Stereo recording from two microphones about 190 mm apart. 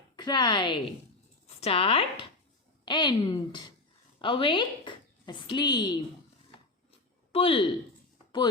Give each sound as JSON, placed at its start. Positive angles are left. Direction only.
{"t": 0.2, "sound": "a woman's voice", "side_deg": 25}
{"t": 7.3, "sound": "a woman's voice", "side_deg": 30}